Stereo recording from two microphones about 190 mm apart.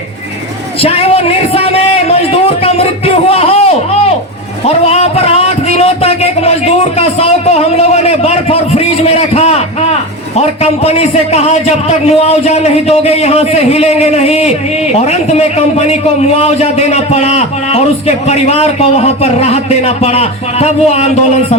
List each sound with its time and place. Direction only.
0.8 s a man's voice: 30° left (ahead or behind)